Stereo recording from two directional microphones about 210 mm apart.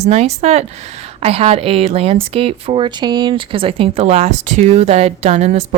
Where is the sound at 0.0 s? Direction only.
30° right (ahead or behind).